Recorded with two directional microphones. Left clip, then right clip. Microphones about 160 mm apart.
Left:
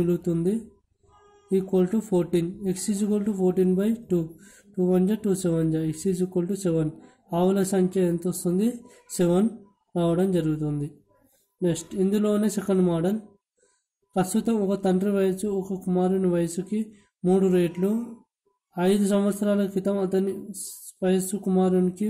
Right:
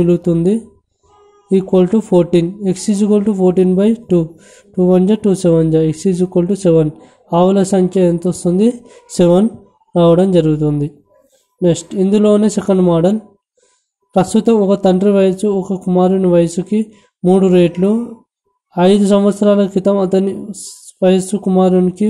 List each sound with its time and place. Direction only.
0.0 s speech: 25° right (ahead or behind)